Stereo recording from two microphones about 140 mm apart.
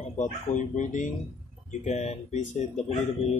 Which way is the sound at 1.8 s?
50° left (ahead or behind).